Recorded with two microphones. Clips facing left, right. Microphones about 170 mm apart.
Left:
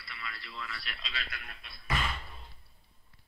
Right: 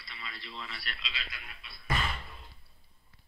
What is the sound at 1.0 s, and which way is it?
Speech, 50° left (ahead or behind).